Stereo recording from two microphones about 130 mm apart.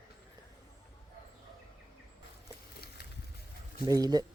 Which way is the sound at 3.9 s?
30° right (ahead or behind).